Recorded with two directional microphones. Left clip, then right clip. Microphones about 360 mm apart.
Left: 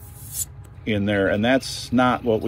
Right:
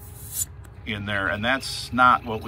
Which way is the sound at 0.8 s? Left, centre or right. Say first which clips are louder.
Left 5 dB; centre.